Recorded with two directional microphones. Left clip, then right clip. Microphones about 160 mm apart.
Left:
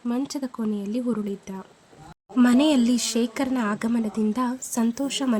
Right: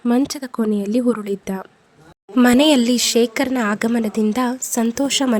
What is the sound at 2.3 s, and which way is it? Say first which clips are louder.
A woman's voice: right 6 dB; 35° right (ahead or behind).